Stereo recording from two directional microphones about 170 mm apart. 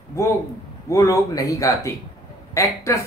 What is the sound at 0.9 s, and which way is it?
Speech, 20° left (ahead or behind).